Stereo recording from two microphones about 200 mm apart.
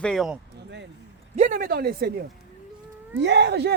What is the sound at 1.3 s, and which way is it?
Speech, 40° right (ahead or behind).